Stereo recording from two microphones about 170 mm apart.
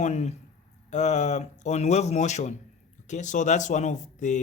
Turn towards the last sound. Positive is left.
turn(degrees=45)  # may be behind; listen again after turning